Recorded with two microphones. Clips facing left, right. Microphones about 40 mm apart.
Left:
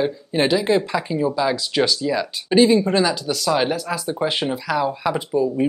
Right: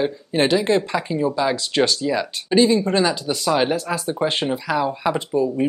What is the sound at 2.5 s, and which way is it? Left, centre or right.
Speech, centre.